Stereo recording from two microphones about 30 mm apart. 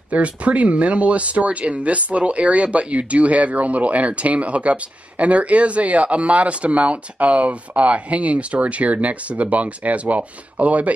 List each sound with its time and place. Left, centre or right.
0.1 s speech: right